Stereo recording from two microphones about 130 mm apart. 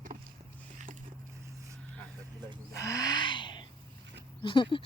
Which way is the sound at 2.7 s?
25° left (ahead or behind).